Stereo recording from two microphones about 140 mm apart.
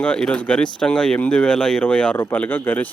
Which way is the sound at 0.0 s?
5° left (ahead or behind).